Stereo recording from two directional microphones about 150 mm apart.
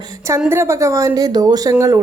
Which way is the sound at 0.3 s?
20° right (ahead or behind).